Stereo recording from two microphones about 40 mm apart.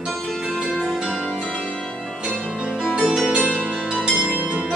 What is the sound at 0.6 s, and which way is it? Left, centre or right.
Music, right.